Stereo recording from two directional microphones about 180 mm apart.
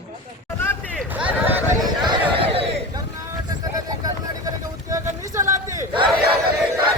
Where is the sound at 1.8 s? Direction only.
25° right (ahead or behind).